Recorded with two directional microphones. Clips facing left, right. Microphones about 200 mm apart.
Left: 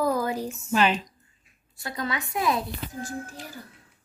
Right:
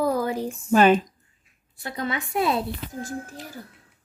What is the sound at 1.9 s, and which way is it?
Speech, 25° right (ahead or behind).